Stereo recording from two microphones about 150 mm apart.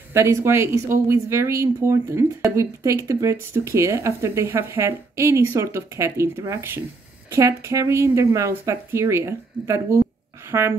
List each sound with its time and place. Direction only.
0.1 s speech: 20° right (ahead or behind)